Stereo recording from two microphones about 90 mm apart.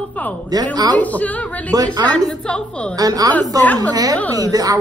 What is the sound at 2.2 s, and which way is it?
Speech, 5° left (ahead or behind).